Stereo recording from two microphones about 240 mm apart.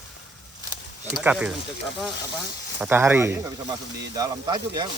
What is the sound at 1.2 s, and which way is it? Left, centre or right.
Speech, centre.